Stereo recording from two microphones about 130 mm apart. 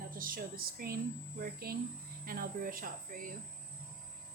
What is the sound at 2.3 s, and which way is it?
Speech, 90° right.